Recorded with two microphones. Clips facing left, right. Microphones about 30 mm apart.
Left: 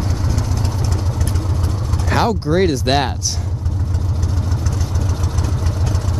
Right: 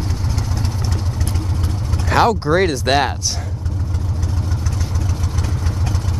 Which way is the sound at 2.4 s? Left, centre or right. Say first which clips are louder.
Even; centre.